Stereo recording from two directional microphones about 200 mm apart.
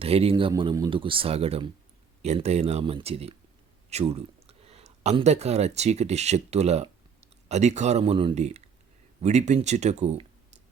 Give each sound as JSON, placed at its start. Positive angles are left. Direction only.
{"t": 0.0, "sound": "speech", "side_deg": -30}